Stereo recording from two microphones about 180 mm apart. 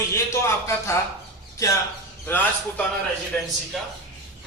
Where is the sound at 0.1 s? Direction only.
15° left (ahead or behind).